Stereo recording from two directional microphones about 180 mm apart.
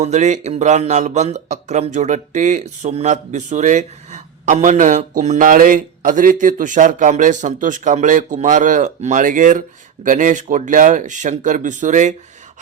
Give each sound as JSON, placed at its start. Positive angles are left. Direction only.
{"t": 0.0, "sound": "speech", "side_deg": -40}